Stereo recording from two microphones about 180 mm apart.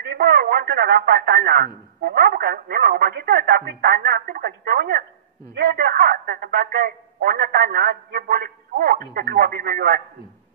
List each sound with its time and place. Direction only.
0.0 s speech: 60° right (ahead or behind)